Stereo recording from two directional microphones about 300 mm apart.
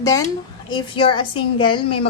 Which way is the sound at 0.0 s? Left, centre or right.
Centre.